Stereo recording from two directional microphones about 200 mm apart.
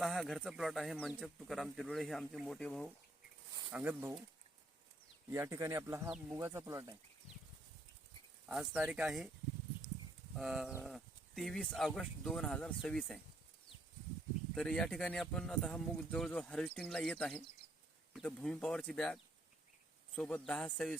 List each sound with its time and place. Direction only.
0.0 s speech: centre (ahead or behind)
3.8 s speech: 10° right (ahead or behind)
5.3 s speech: 15° right (ahead or behind)
8.4 s speech: 5° right (ahead or behind)
10.3 s speech: centre (ahead or behind)
14.5 s speech: 5° left (ahead or behind)